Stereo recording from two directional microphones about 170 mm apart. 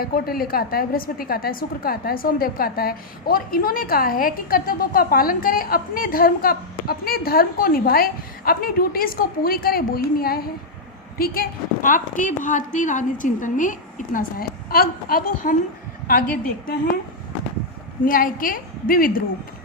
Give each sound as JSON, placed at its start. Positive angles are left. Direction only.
{"t": 0.0, "sound": "a woman's voice", "side_deg": 60}
{"t": 18.0, "sound": "a woman's voice", "side_deg": 55}